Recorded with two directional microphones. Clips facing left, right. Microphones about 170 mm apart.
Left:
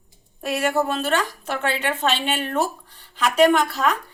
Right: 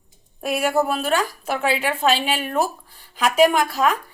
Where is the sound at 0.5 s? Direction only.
10° right (ahead or behind).